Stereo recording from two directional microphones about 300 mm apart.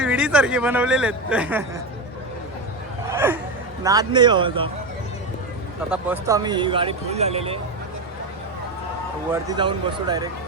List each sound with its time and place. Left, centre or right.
0.0 s speech: centre
3.1 s a sound: centre
3.8 s speech: centre
5.9 s speech: centre
9.3 s speech: centre